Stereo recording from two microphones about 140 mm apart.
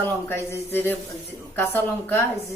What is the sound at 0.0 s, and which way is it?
A woman's voice, 20° left (ahead or behind).